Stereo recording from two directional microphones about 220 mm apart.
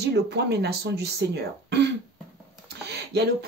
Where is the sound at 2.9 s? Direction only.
50° right (ahead or behind).